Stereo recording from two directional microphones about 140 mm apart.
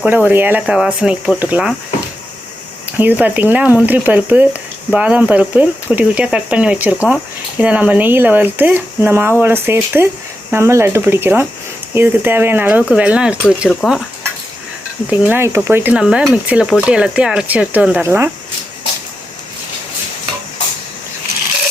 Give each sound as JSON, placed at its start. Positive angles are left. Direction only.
{"t": 0.0, "sound": "speech", "side_deg": -10}
{"t": 3.0, "sound": "speech", "side_deg": -10}
{"t": 15.1, "sound": "speech", "side_deg": -15}